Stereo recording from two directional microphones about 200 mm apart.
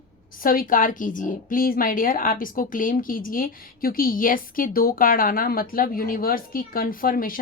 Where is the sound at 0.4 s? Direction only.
45° left (ahead or behind).